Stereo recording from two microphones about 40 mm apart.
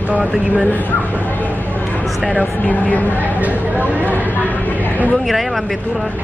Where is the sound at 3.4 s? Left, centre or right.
Right.